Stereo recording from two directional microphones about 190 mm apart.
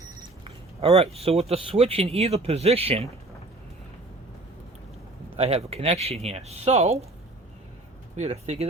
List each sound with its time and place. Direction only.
0.4 s speech: 30° right (ahead or behind)
5.4 s speech: 30° right (ahead or behind)
8.1 s speech: 35° right (ahead or behind)